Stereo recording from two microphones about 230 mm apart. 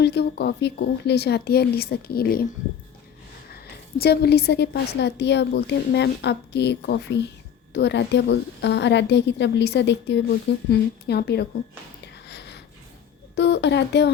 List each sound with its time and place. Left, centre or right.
0.0 s a woman's voice: left
3.5 s a woman's voice: left
12.3 s a sound: left
13.3 s a woman's voice: left